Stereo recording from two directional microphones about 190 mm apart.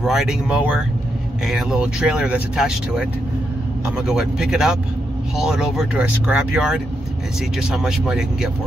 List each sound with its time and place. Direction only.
0.0 s speech: centre (ahead or behind)